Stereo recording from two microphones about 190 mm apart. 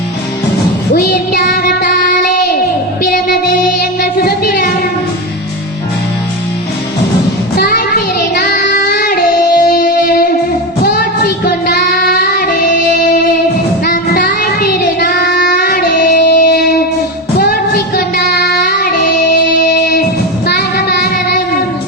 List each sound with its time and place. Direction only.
0.9 s music: 55° left (ahead or behind)
4.0 s child singing: 55° left (ahead or behind)
7.5 s child singing: 55° left (ahead or behind)